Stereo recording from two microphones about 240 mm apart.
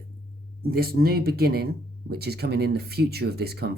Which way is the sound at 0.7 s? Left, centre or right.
Right.